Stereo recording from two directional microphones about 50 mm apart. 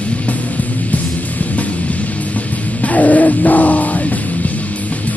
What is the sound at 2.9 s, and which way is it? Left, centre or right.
Music, left.